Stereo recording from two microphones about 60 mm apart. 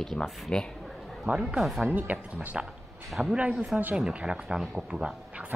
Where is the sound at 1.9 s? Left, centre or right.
Right.